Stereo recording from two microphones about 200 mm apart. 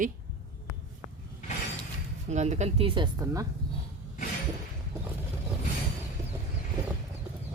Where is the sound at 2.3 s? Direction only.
35° right (ahead or behind).